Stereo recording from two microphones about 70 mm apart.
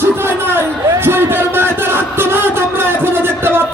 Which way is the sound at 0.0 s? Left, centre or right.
Right.